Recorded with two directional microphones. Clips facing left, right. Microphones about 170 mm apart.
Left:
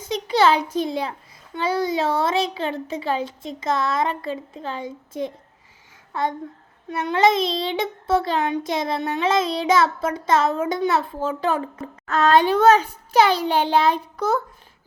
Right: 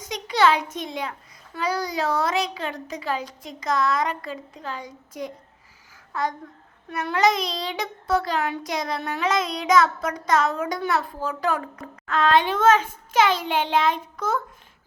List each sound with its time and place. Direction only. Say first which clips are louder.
0.0 s a sound: left 2 dB; 30° left (ahead or behind)
1.5 s child singing: left 4 dB; 25° left (ahead or behind)
12.0 s a child's voice: left 3 dB; 40° left (ahead or behind)